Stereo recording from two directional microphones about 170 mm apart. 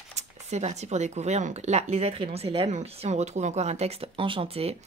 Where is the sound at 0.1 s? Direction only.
40° right (ahead or behind).